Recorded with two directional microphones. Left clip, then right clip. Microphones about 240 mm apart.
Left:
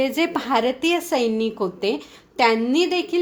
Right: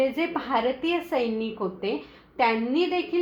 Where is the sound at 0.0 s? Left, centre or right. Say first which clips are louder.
Left 4 dB; left.